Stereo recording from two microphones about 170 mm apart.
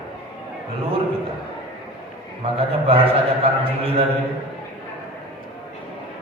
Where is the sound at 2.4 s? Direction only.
35° right (ahead or behind).